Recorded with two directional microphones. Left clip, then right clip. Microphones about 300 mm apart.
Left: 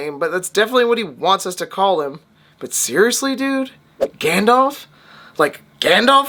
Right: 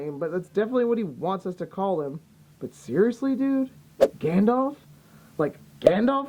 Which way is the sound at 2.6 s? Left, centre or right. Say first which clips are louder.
Left 8 dB; centre.